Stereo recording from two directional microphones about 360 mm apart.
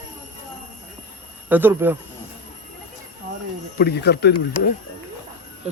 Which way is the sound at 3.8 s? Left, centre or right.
Left.